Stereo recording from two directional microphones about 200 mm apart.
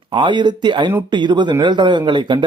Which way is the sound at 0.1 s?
25° right (ahead or behind).